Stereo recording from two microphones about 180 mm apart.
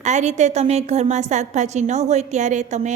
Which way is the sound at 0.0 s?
40° right (ahead or behind).